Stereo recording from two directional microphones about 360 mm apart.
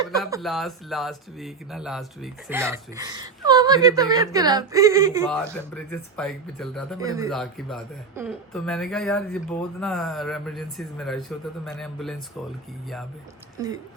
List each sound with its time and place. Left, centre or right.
0.2 s speech: centre
5.3 s a man's voice: centre
7.0 s speech: centre
7.3 s a man's voice: centre